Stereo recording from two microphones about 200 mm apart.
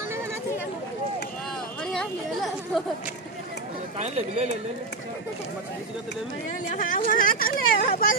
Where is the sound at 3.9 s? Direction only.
35° right (ahead or behind).